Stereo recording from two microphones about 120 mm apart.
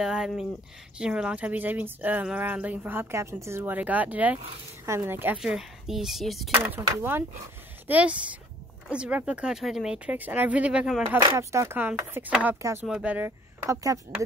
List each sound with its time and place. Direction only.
0.0 s speech: 5° right (ahead or behind)
5.4 s speech: 5° right (ahead or behind)
6.5 s speech: 15° right (ahead or behind)
11.3 s speech: 25° right (ahead or behind)